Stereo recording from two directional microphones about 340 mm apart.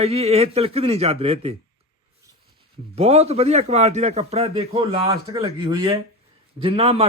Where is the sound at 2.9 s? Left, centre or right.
Centre.